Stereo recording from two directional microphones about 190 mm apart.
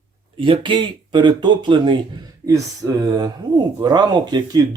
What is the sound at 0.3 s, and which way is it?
A man's voice, 25° right (ahead or behind).